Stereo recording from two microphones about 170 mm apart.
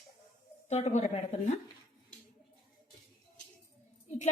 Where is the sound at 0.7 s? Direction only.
40° left (ahead or behind).